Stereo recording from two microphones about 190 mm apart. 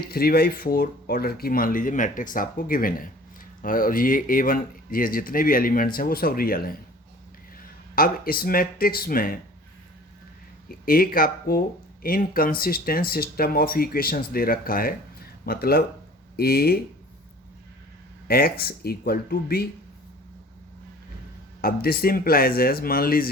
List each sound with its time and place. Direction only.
0.0 s speech: 55° left (ahead or behind)
7.9 s speech: 50° left (ahead or behind)
10.7 s speech: 50° left (ahead or behind)
18.3 s speech: 55° left (ahead or behind)
21.6 s speech: 50° left (ahead or behind)